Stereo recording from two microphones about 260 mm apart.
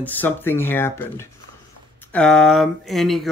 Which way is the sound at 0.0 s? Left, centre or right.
Centre.